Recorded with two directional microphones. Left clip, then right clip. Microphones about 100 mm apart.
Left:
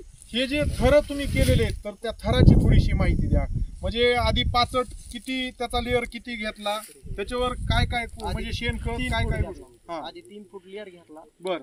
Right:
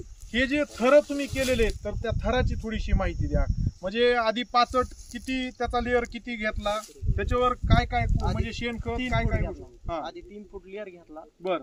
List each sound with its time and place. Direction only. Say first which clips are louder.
0.3 s speech: even; centre (ahead or behind)
3.3 s cricket: left 1 dB; 5° left (ahead or behind)
3.8 s speech: left 1 dB; 10° right (ahead or behind)
10.0 s speech: right 1 dB; 20° left (ahead or behind)
11.4 s speech: right 1 dB; centre (ahead or behind)